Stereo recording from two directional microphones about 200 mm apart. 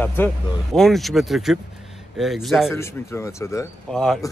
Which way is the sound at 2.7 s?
15° left (ahead or behind).